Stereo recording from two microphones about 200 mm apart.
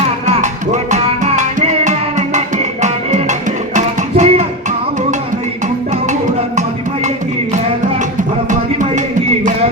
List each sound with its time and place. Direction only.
0.3 s music: 35° right (ahead or behind)
3.8 s music: 35° right (ahead or behind)